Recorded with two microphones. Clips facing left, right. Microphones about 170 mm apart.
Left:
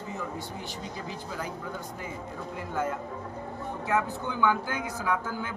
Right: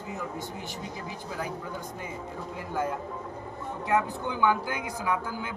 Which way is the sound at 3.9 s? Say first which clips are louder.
Right 2 dB; 15° right (ahead or behind).